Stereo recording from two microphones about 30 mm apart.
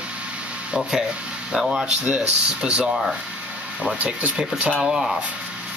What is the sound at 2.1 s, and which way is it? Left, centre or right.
Speech, right.